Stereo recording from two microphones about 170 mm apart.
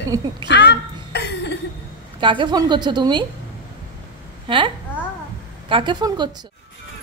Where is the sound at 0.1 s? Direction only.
20° right (ahead or behind).